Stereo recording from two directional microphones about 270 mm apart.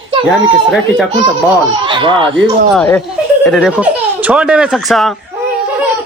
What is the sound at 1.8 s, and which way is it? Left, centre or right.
Speech, centre.